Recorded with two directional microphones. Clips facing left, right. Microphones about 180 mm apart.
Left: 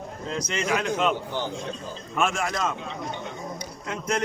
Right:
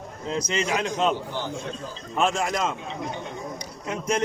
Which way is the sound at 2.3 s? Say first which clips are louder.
Right 2 dB; 20° right (ahead or behind).